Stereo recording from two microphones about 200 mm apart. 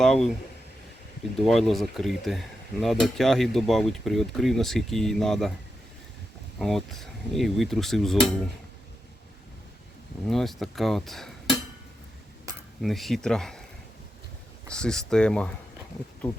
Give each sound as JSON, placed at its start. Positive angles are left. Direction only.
{"t": 0.0, "sound": "cutlery", "side_deg": 5}
{"t": 1.4, "sound": "cutlery", "side_deg": 0}
{"t": 6.6, "sound": "cutlery", "side_deg": 0}
{"t": 10.2, "sound": "cutlery", "side_deg": 0}
{"t": 12.8, "sound": "cutlery", "side_deg": 0}
{"t": 14.7, "sound": "cutlery", "side_deg": 5}